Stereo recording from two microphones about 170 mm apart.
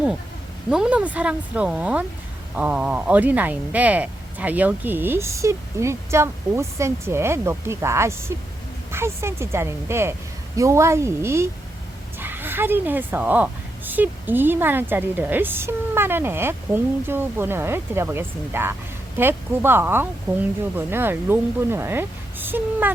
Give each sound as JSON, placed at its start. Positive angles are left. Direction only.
{"t": 0.7, "sound": "a woman's voice", "side_deg": -5}